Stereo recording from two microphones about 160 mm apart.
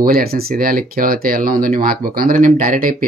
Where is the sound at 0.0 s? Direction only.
70° right (ahead or behind).